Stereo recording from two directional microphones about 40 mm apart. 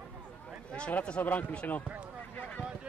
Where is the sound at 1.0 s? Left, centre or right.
Left.